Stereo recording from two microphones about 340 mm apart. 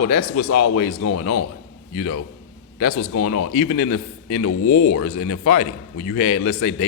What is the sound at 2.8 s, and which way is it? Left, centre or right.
A man's voice, left.